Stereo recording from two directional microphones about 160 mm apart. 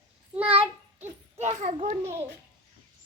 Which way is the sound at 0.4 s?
35° right (ahead or behind).